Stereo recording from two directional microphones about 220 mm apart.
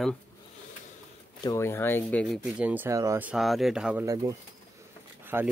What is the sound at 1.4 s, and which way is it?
Speech, 15° left (ahead or behind).